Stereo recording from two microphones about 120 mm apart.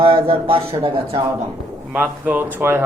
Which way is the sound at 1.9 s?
15° right (ahead or behind).